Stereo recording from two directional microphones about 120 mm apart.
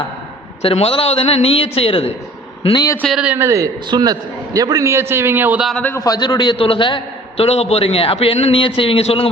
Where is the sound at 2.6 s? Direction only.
35° left (ahead or behind).